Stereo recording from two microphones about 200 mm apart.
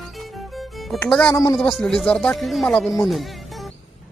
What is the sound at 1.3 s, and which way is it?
Speech, 15° left (ahead or behind).